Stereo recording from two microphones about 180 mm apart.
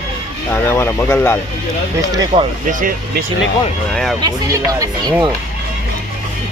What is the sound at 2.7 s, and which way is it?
Speech, 45° right (ahead or behind).